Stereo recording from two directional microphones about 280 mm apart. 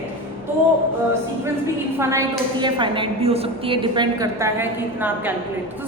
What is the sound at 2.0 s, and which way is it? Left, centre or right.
A woman's voice, centre.